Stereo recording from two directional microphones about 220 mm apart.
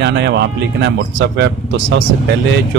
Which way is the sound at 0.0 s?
50° right (ahead or behind).